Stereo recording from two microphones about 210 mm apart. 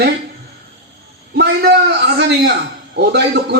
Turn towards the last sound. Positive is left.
turn(degrees=-55)  # may be behind; listen again after turning